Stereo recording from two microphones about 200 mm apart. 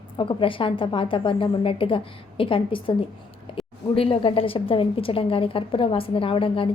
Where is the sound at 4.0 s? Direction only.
25° left (ahead or behind).